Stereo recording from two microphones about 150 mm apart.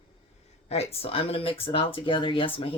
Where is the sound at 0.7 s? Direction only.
40° left (ahead or behind).